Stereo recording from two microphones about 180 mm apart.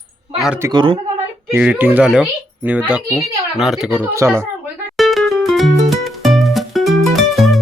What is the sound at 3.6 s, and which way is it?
Speech, 5° right (ahead or behind).